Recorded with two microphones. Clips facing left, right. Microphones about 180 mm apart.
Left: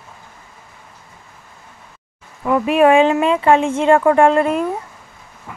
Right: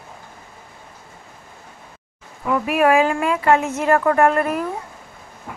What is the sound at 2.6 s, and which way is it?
A woman's voice, 25° left (ahead or behind).